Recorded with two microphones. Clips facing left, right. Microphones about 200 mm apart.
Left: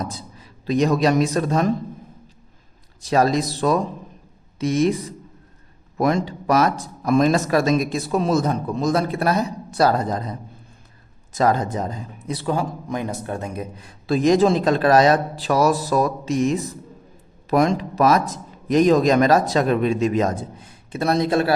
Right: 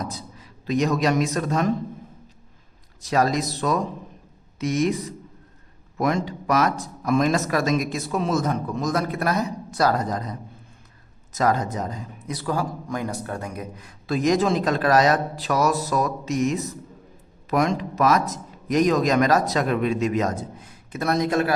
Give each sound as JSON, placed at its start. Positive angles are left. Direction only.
{"t": 0.0, "sound": "a man's voice", "side_deg": 30}
{"t": 3.0, "sound": "a man's voice", "side_deg": 30}